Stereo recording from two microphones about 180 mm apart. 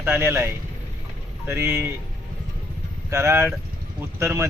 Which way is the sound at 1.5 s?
15° right (ahead or behind).